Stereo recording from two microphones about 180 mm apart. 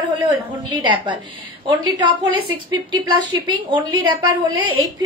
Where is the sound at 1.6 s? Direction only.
25° right (ahead or behind).